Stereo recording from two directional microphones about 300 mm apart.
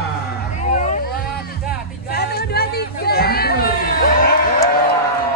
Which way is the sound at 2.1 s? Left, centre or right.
Left.